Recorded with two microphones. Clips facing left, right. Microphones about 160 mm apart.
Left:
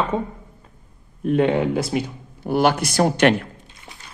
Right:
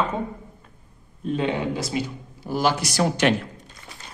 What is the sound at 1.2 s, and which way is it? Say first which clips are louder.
A man's voice: left 6 dB; 55° left (ahead or behind).